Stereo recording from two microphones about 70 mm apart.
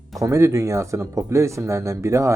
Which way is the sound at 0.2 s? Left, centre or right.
Right.